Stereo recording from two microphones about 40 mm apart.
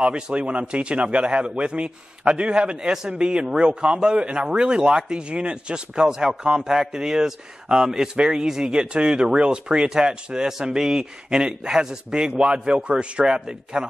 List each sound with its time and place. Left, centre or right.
0.0 s speech: right